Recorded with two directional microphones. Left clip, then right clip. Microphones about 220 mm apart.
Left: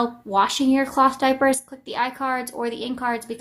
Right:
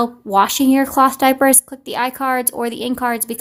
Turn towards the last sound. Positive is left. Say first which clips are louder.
# right 5 dB
turn(degrees=-45)  # may be behind; listen again after turning